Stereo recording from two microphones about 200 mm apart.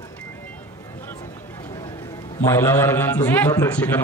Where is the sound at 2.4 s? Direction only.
15° left (ahead or behind).